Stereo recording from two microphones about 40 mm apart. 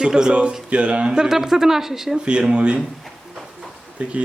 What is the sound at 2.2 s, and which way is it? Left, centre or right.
Speech, right.